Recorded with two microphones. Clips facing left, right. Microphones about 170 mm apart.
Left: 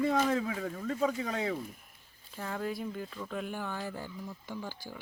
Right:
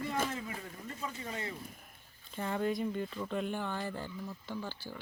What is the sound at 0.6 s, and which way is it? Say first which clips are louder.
Speech: left 11 dB; 90° left.